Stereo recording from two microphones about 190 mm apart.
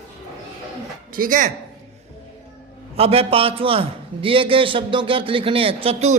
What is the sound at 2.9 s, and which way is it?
A man's voice, 30° right (ahead or behind).